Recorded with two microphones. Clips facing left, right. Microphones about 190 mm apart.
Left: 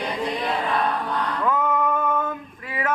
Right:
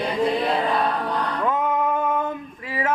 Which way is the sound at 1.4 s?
25° right (ahead or behind).